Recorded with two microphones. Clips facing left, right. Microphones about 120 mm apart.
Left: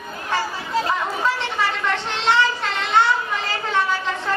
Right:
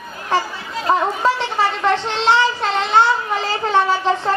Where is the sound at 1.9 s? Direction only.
30° right (ahead or behind).